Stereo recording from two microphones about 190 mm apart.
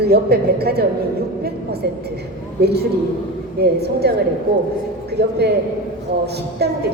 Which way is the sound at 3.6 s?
60° right (ahead or behind).